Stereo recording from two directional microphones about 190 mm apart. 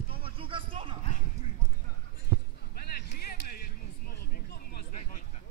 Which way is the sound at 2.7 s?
50° left (ahead or behind).